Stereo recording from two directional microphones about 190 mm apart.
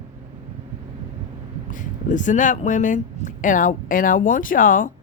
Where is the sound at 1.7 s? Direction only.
45° left (ahead or behind).